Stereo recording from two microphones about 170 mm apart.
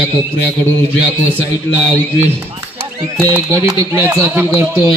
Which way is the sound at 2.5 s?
25° right (ahead or behind).